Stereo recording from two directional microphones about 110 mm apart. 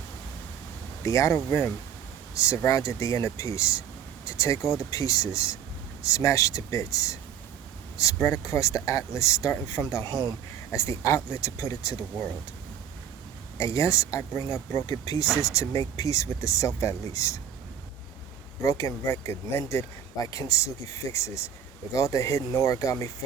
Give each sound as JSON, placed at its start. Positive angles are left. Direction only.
{"t": 1.0, "sound": "speech", "side_deg": 30}
{"t": 13.6, "sound": "speech", "side_deg": 25}
{"t": 18.6, "sound": "speech", "side_deg": 30}